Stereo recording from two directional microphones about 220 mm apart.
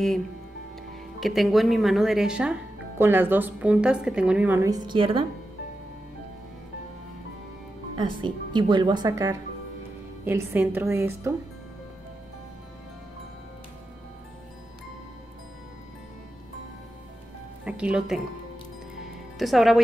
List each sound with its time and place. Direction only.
1.2 s a woman's voice: centre (ahead or behind); by 5.2 s 25° right (ahead or behind)
8.0 s a woman's voice: 20° right (ahead or behind)
17.6 s speech: 5° right (ahead or behind)
19.3 s a woman's voice: centre (ahead or behind)